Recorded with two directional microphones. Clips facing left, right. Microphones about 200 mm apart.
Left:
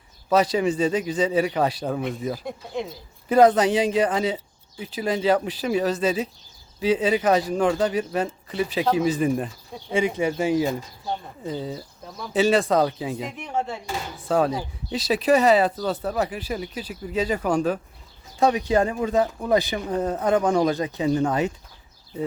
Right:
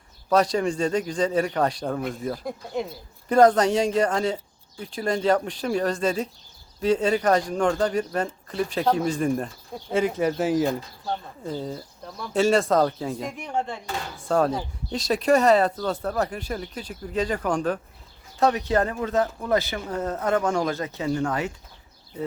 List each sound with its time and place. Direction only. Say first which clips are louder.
0.3 s speech: left 1 dB; 5° left (ahead or behind); by 21.5 s 20° left (ahead or behind)